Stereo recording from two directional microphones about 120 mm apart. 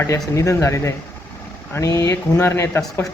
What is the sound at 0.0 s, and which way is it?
Speech, 25° left (ahead or behind).